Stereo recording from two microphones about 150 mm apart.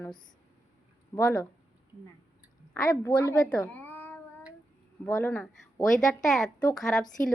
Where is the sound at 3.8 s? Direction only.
10° left (ahead or behind).